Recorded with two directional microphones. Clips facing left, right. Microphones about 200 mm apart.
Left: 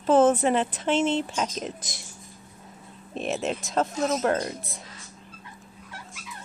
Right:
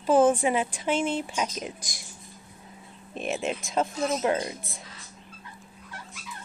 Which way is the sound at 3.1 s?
Centre (ahead or behind).